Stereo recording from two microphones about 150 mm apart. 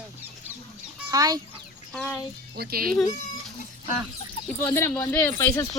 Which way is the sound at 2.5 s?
90° right.